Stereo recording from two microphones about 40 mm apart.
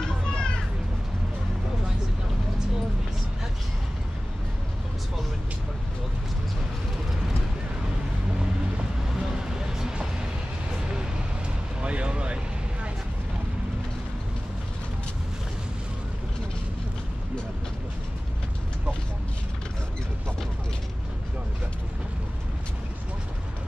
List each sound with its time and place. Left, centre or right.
0.0 s children playing: left
9.2 s music: centre
11.8 s a sound: right